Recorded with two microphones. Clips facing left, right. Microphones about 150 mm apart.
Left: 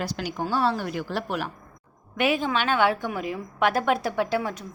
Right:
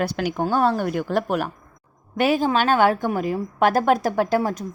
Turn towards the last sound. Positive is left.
turn(degrees=-40)  # may be behind; listen again after turning